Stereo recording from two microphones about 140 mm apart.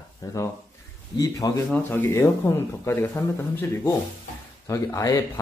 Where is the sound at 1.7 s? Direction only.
15° left (ahead or behind).